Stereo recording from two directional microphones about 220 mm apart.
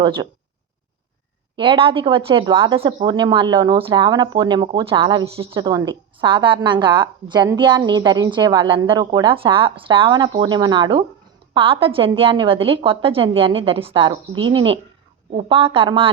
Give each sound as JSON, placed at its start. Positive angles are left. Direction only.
{"t": 0.0, "sound": "speech", "side_deg": -20}
{"t": 1.5, "sound": "speech", "side_deg": -25}